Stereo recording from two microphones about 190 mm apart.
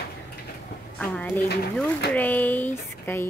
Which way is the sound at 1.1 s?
5° left (ahead or behind).